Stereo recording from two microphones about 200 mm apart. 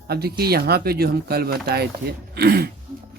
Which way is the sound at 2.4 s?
50° right (ahead or behind).